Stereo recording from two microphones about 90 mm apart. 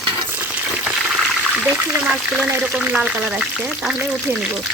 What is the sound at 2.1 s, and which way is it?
Speech, 15° right (ahead or behind).